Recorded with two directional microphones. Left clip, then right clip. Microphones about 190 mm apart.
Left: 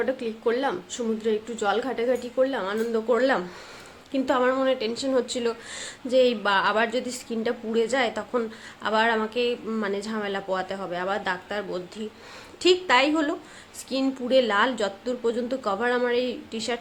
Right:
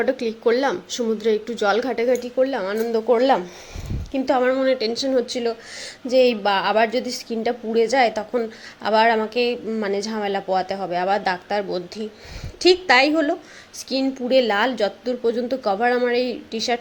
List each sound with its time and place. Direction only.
0.0 s a woman's voice: 25° right (ahead or behind)